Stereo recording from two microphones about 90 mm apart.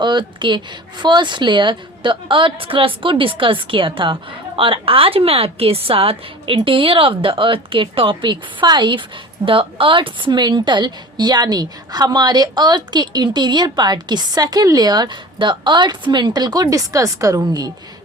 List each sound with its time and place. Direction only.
0.0 s speech: 60° right (ahead or behind)
9.5 s a woman's voice: 75° right (ahead or behind); by 17.7 s 45° right (ahead or behind)